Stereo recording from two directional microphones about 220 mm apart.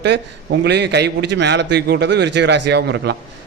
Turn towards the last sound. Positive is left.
turn(degrees=-50)  # may be behind; listen again after turning